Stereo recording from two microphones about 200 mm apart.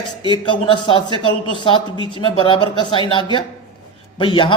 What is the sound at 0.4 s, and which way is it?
A man's voice, 25° left (ahead or behind).